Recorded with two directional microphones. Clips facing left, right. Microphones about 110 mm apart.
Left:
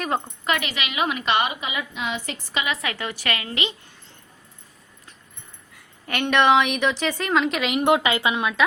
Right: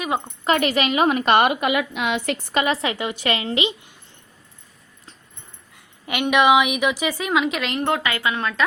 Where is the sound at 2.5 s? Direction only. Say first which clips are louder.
Right 5 dB; 40° right (ahead or behind).